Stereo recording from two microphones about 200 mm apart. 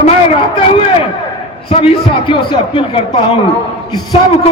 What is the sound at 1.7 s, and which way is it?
A man's voice, 25° left (ahead or behind).